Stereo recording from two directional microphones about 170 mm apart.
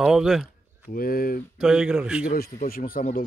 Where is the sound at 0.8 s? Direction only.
60° left (ahead or behind).